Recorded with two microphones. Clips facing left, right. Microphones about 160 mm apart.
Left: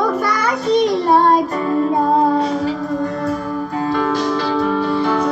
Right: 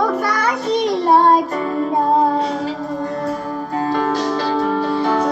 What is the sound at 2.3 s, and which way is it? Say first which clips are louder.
Music: left 2 dB; 30° right (ahead or behind).